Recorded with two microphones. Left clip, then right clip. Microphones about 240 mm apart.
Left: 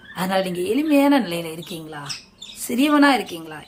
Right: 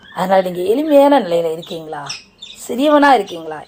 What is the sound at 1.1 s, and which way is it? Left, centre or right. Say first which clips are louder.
A woman's voice: right 8 dB; centre.